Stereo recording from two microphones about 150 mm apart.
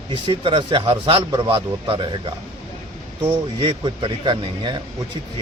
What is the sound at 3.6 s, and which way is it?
A man's voice, 35° right (ahead or behind).